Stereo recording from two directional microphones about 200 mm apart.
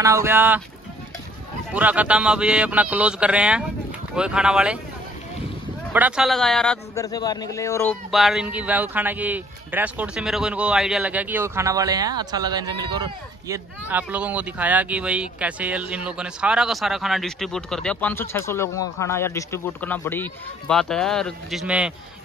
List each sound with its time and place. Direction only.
0.0 s a man's voice: 15° right (ahead or behind)
1.7 s speech: 5° right (ahead or behind)
5.9 s speech: 5° right (ahead or behind)
7.0 s speech: 20° left (ahead or behind)
8.1 s a man's voice: centre (ahead or behind); by 13.6 s 20° right (ahead or behind)
13.8 s speech: 10° right (ahead or behind)